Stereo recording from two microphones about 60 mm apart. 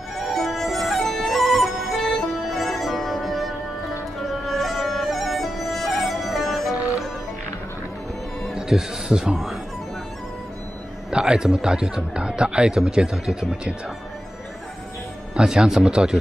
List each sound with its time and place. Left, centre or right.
0.1 s music: centre
8.4 s speech: centre
11.1 s speech: centre
15.3 s speech: centre